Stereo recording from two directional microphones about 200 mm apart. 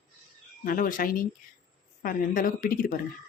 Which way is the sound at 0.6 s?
45° left (ahead or behind).